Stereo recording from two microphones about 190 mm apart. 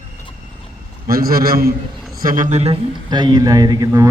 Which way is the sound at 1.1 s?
50° right (ahead or behind).